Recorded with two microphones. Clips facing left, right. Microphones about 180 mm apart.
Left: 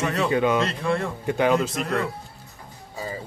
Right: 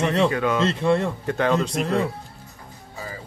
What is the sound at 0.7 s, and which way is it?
Speech, 25° right (ahead or behind).